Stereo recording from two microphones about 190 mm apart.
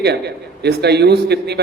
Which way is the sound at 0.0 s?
60° right (ahead or behind).